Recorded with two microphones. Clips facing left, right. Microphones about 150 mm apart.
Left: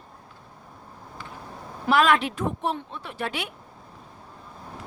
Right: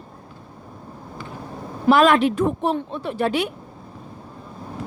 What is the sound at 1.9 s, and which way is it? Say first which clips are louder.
Speech: right 6 dB; 40° right (ahead or behind).